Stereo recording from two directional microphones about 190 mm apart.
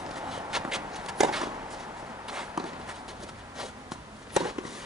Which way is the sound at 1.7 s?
5° right (ahead or behind).